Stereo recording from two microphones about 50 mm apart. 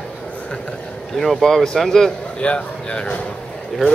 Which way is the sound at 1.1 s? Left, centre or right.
Centre.